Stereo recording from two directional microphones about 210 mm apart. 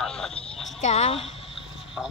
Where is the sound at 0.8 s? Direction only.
30° left (ahead or behind).